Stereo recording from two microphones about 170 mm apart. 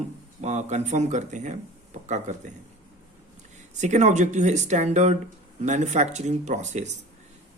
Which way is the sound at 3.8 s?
45° right (ahead or behind).